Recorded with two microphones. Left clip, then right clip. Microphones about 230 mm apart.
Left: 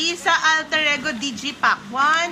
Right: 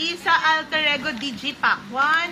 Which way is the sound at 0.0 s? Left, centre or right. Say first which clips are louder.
Left 1 dB; left.